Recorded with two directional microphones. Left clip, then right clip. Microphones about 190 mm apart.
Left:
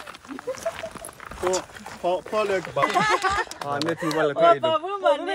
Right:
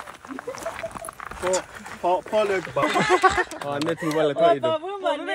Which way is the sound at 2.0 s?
25° right (ahead or behind).